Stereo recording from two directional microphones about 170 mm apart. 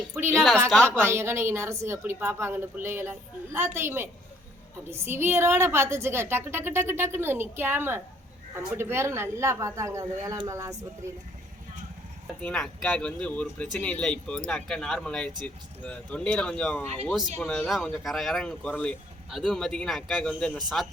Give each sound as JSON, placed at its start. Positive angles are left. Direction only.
{"t": 0.3, "sound": "speech", "side_deg": 5}
{"t": 0.9, "sound": "a woman's voice", "side_deg": -15}
{"t": 12.4, "sound": "speech", "side_deg": 5}